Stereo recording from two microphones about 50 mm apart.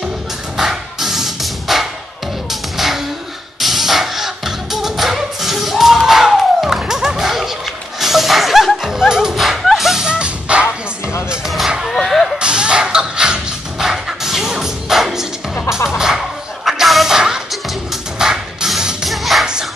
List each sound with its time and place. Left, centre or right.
0.6 s music: centre
3.6 s music: centre
10.0 s music: right
11.4 s a sound: centre
12.4 s music: centre
19.0 s music: centre